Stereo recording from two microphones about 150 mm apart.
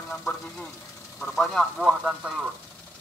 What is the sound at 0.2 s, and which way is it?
Speech, 5° left (ahead or behind).